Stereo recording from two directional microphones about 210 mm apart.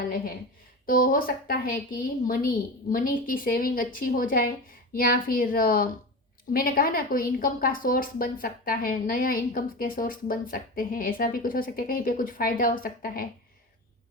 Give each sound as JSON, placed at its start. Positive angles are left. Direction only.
{"t": 0.9, "sound": "a woman's voice", "side_deg": 40}